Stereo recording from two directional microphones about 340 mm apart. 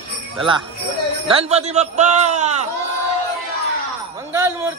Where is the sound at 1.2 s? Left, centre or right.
Centre.